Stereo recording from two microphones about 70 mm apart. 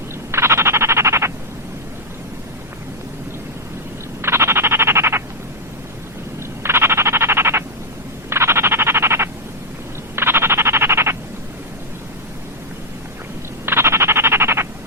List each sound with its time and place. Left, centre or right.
0.3 s frog: right
4.2 s frog: right
6.6 s frog: right
13.7 s a sound: right